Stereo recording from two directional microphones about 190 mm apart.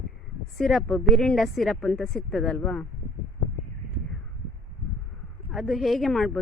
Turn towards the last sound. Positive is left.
turn(degrees=0)  # may be behind; listen again after turning